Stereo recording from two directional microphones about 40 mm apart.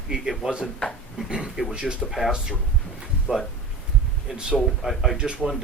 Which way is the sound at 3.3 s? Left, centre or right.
Right.